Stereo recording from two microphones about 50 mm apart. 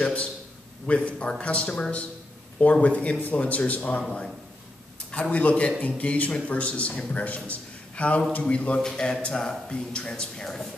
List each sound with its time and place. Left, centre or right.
0.0 s a man's voice: left
5.3 s a man's voice: left
8.8 s speech: centre